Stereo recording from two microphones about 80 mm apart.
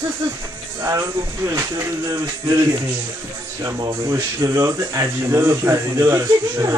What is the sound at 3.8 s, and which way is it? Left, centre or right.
Speech, right.